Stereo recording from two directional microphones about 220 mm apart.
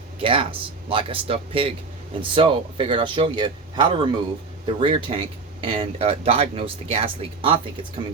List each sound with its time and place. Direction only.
0.2 s speech: 25° right (ahead or behind)